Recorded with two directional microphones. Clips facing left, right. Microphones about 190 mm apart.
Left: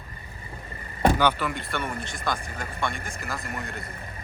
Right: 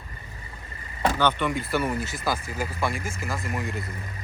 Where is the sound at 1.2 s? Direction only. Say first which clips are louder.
Right 1 dB; 5° left (ahead or behind).